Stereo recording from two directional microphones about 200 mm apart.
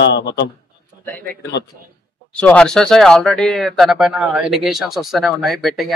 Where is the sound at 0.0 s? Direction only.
60° left (ahead or behind).